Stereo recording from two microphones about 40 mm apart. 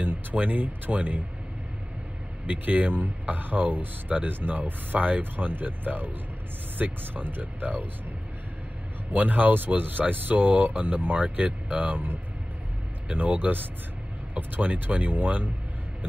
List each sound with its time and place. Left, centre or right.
0.0 s speech: right
2.4 s speech: right
9.1 s speech: right
14.6 s speech: right